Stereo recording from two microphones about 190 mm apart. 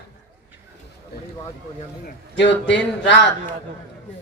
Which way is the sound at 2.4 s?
70° left (ahead or behind).